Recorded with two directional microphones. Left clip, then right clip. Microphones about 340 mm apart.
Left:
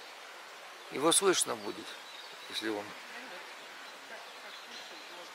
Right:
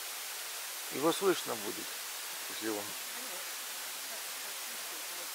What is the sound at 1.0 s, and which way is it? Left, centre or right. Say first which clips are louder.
Speech: left 3 dB; centre.